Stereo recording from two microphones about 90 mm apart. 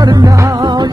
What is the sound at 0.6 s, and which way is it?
Music, 50° right (ahead or behind).